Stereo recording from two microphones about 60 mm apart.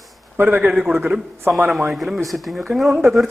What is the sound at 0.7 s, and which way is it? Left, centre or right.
Speech, centre.